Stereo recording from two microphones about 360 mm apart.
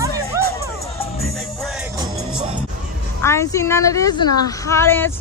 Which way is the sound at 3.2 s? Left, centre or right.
Centre.